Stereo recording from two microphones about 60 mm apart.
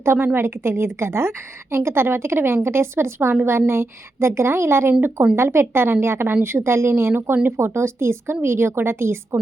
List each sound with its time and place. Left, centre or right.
0.0 s a woman's voice: right